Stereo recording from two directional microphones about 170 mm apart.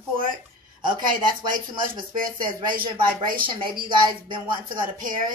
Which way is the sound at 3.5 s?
30° right (ahead or behind).